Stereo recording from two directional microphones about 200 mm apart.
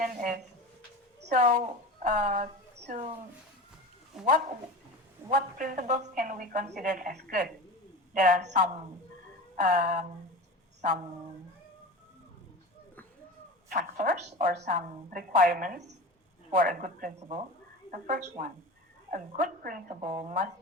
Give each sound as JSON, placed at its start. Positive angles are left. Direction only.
{"t": 0.0, "sound": "a woman's voice", "side_deg": -45}
{"t": 5.3, "sound": "a woman's voice", "side_deg": -40}
{"t": 10.8, "sound": "a sound", "side_deg": -45}
{"t": 13.7, "sound": "a woman's voice", "side_deg": -45}